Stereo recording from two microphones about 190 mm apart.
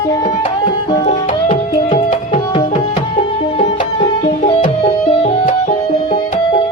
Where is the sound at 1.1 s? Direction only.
30° left (ahead or behind).